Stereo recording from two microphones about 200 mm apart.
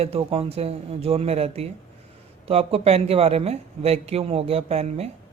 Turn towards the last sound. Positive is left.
turn(degrees=-30)  # may be behind; listen again after turning